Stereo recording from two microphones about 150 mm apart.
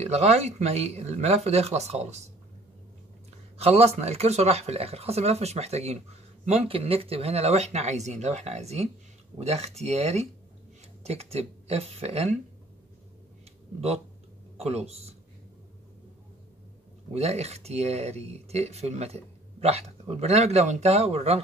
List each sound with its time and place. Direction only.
0.0 s speech: 45° right (ahead or behind)
3.5 s speech: 45° right (ahead or behind)
13.7 s speech: 45° right (ahead or behind)
17.1 s speech: 45° right (ahead or behind)